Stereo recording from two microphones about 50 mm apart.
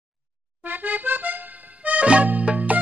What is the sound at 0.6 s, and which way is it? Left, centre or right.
Accordion, right.